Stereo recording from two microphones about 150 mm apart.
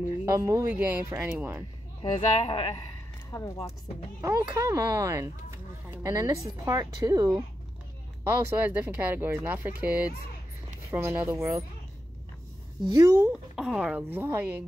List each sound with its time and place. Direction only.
0.2 s speech: 20° right (ahead or behind)
2.1 s speech: 35° left (ahead or behind)
3.3 s speech: 20° left (ahead or behind)
4.2 s speech: 20° right (ahead or behind)
12.8 s speech: 25° right (ahead or behind)
13.3 s speech: 5° right (ahead or behind)